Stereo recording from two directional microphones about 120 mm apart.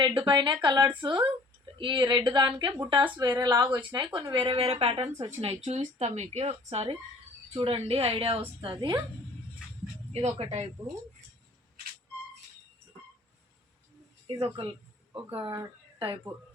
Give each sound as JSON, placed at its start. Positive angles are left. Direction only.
{"t": 0.0, "sound": "a woman's voice", "side_deg": -40}
{"t": 10.1, "sound": "a woman's voice", "side_deg": -55}
{"t": 14.4, "sound": "speech", "side_deg": -45}